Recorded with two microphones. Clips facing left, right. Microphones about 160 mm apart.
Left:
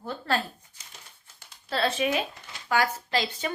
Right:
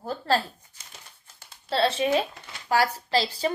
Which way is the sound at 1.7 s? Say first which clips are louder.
Right 3 dB; 30° right (ahead or behind).